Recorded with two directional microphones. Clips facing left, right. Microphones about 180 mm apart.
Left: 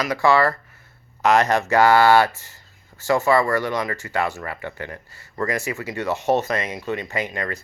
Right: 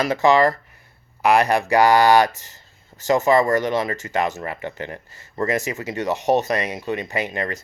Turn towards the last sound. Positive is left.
turn(degrees=-20)  # may be behind; listen again after turning